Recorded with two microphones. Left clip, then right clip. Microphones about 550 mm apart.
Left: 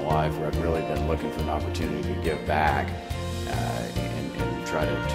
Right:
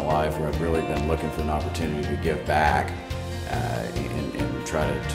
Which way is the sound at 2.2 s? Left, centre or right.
Left.